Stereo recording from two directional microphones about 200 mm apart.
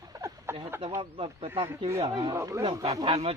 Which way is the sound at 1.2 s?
25° right (ahead or behind).